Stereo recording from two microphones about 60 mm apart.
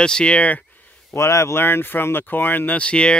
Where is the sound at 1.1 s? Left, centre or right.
Left.